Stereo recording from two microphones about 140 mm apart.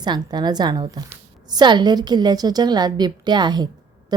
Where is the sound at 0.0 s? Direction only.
30° right (ahead or behind).